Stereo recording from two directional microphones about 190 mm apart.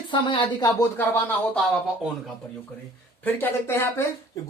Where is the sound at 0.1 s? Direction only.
25° left (ahead or behind).